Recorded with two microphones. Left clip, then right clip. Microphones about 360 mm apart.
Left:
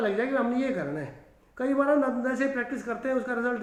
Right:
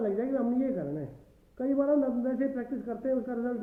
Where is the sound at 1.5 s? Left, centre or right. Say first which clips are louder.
Left 3 dB; centre.